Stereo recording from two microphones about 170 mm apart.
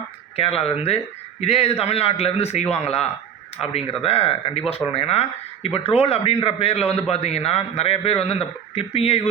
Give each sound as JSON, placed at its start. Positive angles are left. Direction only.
{"t": 0.3, "sound": "a man's voice", "side_deg": 35}